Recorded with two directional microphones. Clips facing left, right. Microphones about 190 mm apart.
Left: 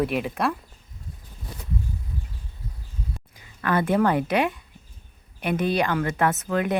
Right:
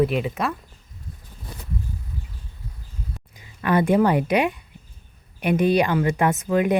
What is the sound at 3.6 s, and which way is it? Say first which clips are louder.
A woman's voice: right 3 dB; 15° right (ahead or behind).